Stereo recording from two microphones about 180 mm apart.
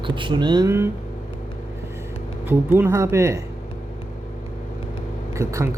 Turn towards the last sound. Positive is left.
turn(degrees=-15)  # may be behind; listen again after turning